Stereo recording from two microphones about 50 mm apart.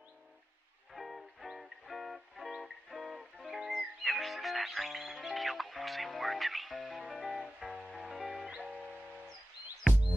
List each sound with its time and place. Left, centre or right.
0.9 s music: centre
8.5 s music: right